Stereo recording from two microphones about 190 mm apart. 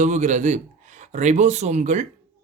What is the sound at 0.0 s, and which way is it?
Speech, 40° right (ahead or behind).